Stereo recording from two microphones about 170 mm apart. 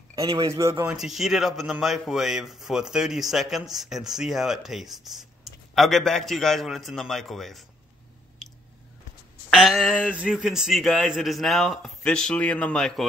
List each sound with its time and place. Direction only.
0.5 s speech: 20° right (ahead or behind)
0.8 s a man's voice: centre (ahead or behind)
8.4 s chewing: centre (ahead or behind)
9.5 s a man's voice: centre (ahead or behind)